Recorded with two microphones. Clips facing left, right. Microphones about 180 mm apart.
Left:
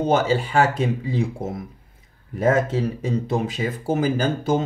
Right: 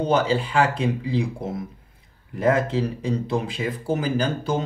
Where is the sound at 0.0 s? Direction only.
45° left (ahead or behind).